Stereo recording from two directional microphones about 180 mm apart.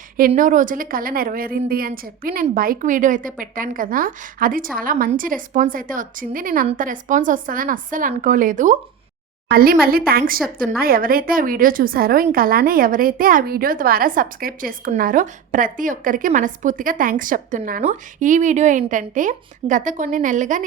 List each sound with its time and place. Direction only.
0.2 s a woman's voice: 45° right (ahead or behind)